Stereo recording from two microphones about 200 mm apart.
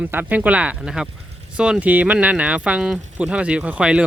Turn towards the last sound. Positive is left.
turn(degrees=-5)  # may be behind; listen again after turning